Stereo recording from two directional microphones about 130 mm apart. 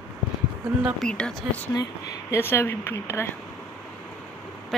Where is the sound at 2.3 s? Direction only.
20° left (ahead or behind).